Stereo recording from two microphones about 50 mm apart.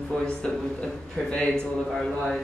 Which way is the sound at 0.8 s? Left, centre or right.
Centre.